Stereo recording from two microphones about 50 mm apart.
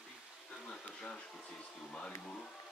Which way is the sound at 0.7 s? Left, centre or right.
Centre.